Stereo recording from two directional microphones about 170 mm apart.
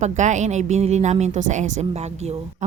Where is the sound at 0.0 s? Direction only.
45° right (ahead or behind).